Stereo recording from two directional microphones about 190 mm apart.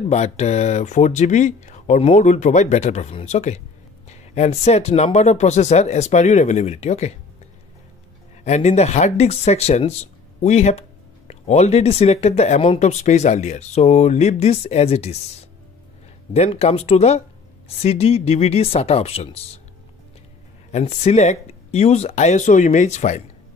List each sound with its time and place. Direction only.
0.1 s speech: 35° left (ahead or behind)
8.5 s speech: 35° left (ahead or behind)
20.7 s speech: 35° left (ahead or behind)